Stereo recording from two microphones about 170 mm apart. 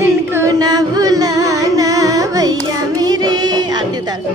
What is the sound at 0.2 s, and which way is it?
Music, 15° right (ahead or behind).